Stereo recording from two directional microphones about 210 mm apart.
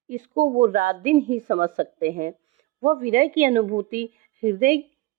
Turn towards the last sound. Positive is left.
turn(degrees=-40)  # may be behind; listen again after turning